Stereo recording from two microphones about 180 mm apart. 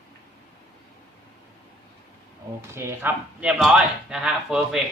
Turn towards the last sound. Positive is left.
turn(degrees=-5)  # may be behind; listen again after turning